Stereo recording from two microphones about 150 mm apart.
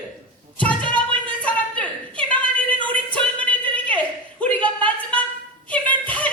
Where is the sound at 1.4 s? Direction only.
10° left (ahead or behind).